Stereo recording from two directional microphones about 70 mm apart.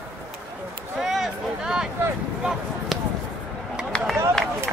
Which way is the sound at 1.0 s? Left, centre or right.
Centre.